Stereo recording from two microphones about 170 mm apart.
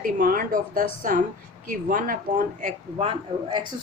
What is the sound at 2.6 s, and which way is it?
Speech, 40° right (ahead or behind).